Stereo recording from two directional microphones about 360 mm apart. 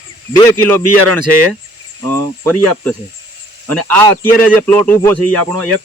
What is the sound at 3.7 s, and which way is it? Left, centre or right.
Speech, right.